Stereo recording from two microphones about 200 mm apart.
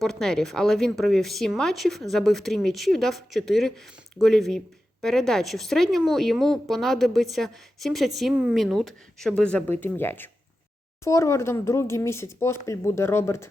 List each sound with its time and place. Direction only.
0.0 s speech: centre (ahead or behind)